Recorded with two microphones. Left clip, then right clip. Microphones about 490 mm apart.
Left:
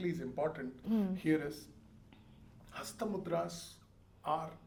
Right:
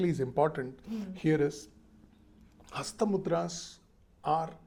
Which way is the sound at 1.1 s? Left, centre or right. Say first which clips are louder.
Right 9 dB; right.